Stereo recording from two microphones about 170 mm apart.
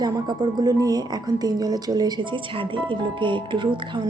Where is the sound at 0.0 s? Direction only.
25° right (ahead or behind).